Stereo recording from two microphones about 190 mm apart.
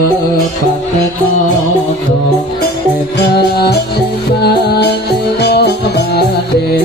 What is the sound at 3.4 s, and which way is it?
Music, 55° left (ahead or behind).